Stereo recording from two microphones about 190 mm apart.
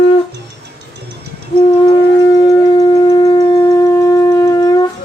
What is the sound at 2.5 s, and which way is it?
Wind instrument, 25° left (ahead or behind).